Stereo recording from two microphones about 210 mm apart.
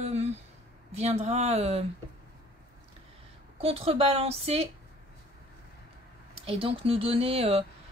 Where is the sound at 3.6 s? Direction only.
30° right (ahead or behind).